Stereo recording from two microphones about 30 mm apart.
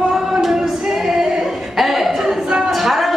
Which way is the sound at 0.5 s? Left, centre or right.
Centre.